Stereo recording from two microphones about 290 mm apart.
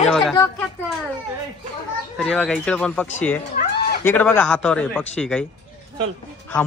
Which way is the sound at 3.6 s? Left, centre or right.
Left.